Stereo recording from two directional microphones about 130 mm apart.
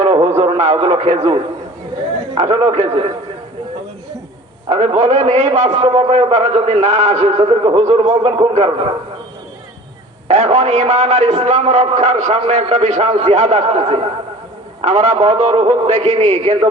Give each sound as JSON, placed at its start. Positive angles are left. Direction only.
{"t": 0.0, "sound": "a sound", "side_deg": -50}
{"t": 2.5, "sound": "a man's voice", "side_deg": -55}
{"t": 4.7, "sound": "a man's voice", "side_deg": -55}
{"t": 5.8, "sound": "a man's voice", "side_deg": -50}
{"t": 8.1, "sound": "a man's voice", "side_deg": -45}
{"t": 10.2, "sound": "a man's voice", "side_deg": -60}
{"t": 12.4, "sound": "a man's voice", "side_deg": -55}